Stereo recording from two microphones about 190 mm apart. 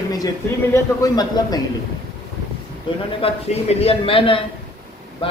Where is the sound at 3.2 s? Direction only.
30° left (ahead or behind).